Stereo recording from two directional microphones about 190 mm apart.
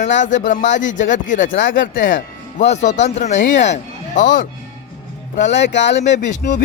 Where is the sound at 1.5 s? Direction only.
75° left (ahead or behind).